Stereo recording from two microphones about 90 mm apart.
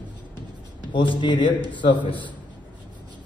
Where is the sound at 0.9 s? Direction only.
65° left (ahead or behind).